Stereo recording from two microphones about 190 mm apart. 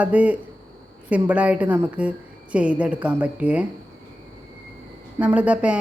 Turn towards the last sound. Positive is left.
turn(degrees=-5)  # may be behind; listen again after turning